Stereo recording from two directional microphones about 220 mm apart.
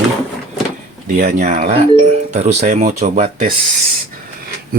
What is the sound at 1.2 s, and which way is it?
Speech, 40° right (ahead or behind).